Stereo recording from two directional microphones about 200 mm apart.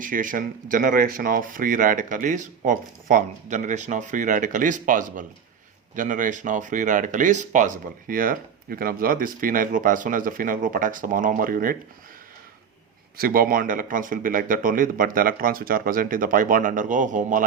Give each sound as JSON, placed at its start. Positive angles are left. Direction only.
{"t": 0.0, "sound": "speech", "side_deg": -40}
{"t": 13.1, "sound": "speech", "side_deg": -45}